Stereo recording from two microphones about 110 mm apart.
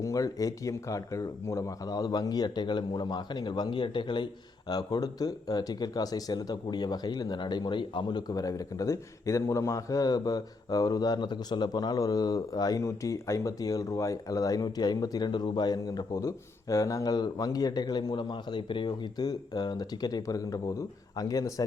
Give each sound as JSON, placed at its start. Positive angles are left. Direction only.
{"t": 0.0, "sound": "speech", "side_deg": 30}